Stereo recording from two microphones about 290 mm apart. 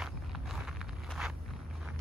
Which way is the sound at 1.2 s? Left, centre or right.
Centre.